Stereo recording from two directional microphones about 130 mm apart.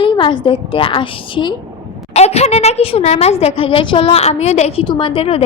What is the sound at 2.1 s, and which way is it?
A woman's voice, 55° left (ahead or behind).